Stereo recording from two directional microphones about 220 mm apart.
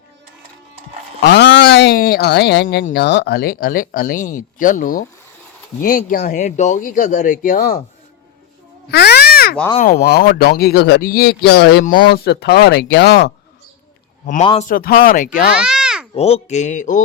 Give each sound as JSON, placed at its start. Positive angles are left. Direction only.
{"t": 1.2, "sound": "speech", "side_deg": 50}
{"t": 6.1, "sound": "speech", "side_deg": 35}
{"t": 8.9, "sound": "a sound", "side_deg": 45}
{"t": 9.7, "sound": "speech", "side_deg": 35}
{"t": 14.4, "sound": "a man's voice", "side_deg": 25}
{"t": 14.7, "sound": "speech", "side_deg": 40}
{"t": 15.5, "sound": "a sound", "side_deg": -5}
{"t": 16.1, "sound": "speech", "side_deg": 30}